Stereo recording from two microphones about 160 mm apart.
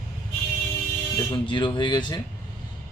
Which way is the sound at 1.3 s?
30° left (ahead or behind).